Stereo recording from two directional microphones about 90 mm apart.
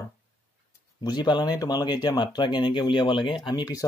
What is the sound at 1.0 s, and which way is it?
Speech, 50° left (ahead or behind).